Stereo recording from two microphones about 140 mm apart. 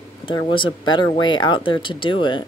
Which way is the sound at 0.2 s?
40° left (ahead or behind).